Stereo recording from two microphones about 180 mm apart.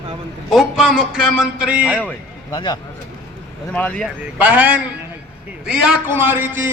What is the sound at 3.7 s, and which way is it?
Speech, 5° left (ahead or behind).